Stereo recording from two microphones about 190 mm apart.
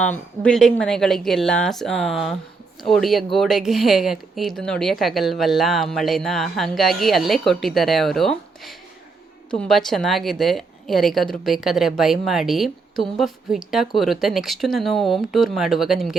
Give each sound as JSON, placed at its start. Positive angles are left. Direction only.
{"t": 0.0, "sound": "a woman's voice", "side_deg": 5}